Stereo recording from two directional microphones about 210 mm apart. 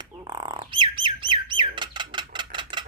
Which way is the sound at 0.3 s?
25° right (ahead or behind).